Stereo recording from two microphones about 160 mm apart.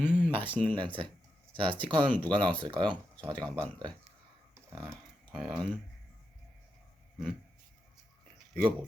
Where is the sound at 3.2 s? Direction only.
10° left (ahead or behind).